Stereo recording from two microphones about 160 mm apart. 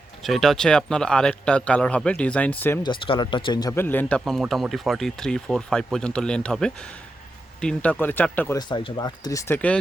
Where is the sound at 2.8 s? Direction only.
30° left (ahead or behind); by 8.5 s 10° left (ahead or behind).